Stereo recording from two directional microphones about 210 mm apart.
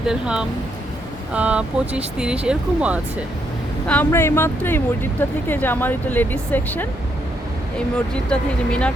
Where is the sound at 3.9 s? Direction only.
10° left (ahead or behind).